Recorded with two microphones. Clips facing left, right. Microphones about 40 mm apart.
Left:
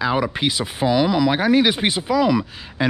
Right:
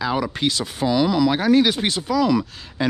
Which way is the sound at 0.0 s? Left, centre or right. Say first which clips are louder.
Left 2 dB; centre.